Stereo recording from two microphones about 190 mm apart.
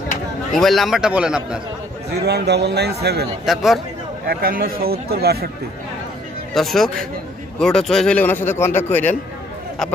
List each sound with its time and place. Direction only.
0.6 s a man's voice: centre (ahead or behind)
2.1 s a man's voice: 60° right (ahead or behind)
3.4 s a man's voice: centre (ahead or behind)
4.3 s speech: 50° right (ahead or behind)
6.5 s a man's voice: centre (ahead or behind)